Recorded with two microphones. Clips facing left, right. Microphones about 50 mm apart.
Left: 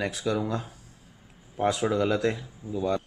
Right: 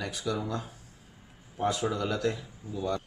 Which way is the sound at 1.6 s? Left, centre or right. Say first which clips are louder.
Left 4 dB; left.